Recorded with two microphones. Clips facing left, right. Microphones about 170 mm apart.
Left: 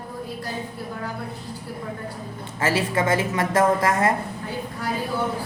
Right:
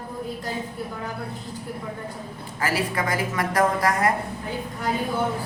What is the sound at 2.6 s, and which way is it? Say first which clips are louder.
A woman's voice: left 3 dB; 25° left (ahead or behind).